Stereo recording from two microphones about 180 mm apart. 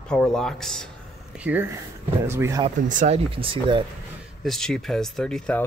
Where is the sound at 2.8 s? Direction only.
40° right (ahead or behind).